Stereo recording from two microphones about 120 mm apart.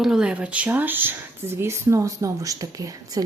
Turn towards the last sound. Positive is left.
turn(degrees=-30)  # may be behind; listen again after turning